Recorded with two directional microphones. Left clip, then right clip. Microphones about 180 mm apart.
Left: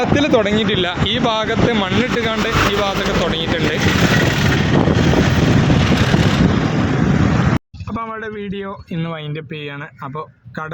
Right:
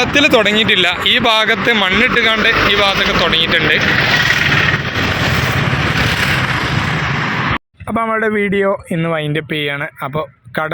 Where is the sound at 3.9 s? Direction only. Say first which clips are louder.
Right 4 dB; 45° left (ahead or behind).